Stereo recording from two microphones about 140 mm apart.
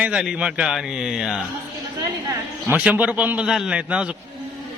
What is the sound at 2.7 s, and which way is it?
A man's voice, 10° right (ahead or behind).